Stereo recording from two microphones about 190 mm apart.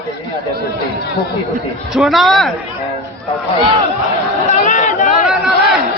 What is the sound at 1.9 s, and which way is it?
Speech, centre (ahead or behind).